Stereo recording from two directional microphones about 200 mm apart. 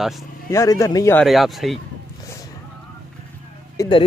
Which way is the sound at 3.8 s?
25° left (ahead or behind).